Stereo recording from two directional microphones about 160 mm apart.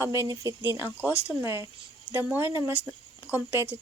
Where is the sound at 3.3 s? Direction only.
15° left (ahead or behind).